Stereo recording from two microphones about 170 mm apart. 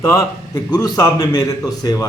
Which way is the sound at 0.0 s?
20° left (ahead or behind).